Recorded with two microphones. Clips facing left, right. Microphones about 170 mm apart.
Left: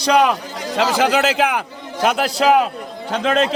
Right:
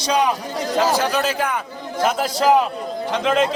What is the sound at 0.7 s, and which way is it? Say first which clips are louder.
A man's voice: left 2 dB; 80° left.